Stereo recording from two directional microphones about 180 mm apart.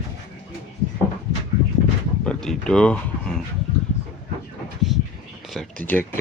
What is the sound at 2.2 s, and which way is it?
Speech, 5° left (ahead or behind).